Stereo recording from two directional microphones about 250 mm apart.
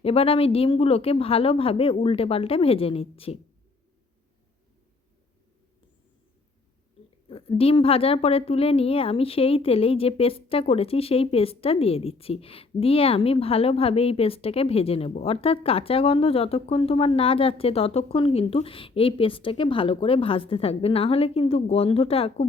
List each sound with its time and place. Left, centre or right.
0.0 s a woman's voice: left
7.3 s a woman's voice: left